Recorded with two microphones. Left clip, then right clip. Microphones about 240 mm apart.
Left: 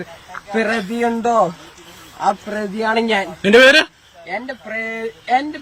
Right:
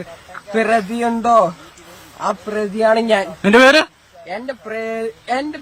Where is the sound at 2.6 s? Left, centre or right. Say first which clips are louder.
Right 4 dB; centre.